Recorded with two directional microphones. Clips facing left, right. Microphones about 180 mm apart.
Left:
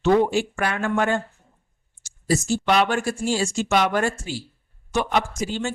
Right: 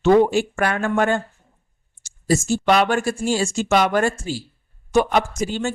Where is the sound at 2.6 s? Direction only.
45° right (ahead or behind).